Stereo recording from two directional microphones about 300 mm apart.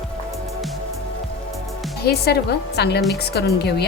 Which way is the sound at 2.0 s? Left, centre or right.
Left.